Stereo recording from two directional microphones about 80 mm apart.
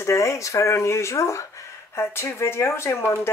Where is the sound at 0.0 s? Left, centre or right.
Left.